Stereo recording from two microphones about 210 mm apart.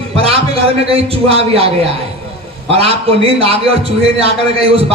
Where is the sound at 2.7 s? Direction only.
30° right (ahead or behind).